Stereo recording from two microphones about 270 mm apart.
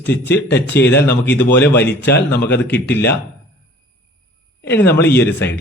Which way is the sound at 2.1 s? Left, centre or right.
Left.